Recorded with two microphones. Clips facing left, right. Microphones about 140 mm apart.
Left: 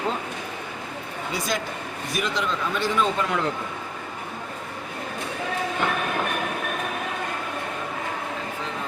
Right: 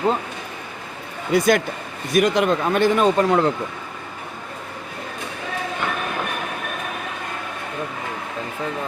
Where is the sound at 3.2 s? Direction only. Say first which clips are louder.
Right 8 dB; 40° right (ahead or behind).